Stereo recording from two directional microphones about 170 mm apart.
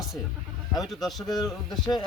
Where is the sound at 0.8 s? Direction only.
Centre (ahead or behind).